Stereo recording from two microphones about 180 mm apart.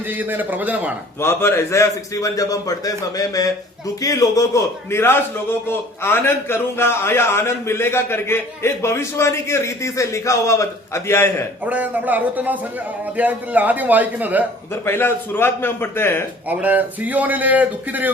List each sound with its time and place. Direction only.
0.1 s a man's voice: 10° right (ahead or behind)
1.2 s a man's voice: 15° left (ahead or behind)
11.6 s a man's voice: 10° right (ahead or behind)
14.7 s a man's voice: 10° left (ahead or behind)
16.5 s a man's voice: 10° right (ahead or behind)